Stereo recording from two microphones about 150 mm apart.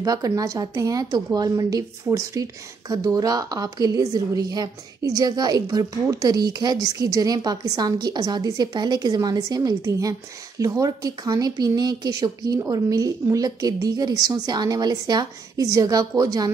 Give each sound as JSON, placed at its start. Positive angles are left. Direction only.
{"t": 0.0, "sound": "a woman's voice", "side_deg": -25}